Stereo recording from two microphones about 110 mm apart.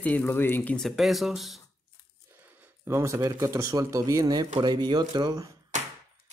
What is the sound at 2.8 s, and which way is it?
Speech, 25° right (ahead or behind).